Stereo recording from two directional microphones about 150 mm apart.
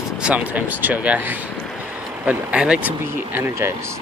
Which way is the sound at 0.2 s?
10° right (ahead or behind).